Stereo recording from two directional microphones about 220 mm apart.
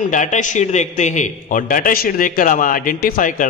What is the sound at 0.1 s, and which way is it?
A man's voice, 35° left (ahead or behind).